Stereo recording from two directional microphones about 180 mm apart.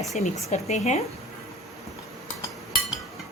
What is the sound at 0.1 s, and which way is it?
Dishes, 40° left (ahead or behind).